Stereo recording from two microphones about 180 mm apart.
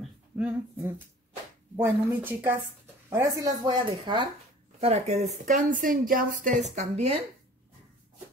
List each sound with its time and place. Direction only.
0.4 s speech: 10° right (ahead or behind); by 7.1 s 40° right (ahead or behind)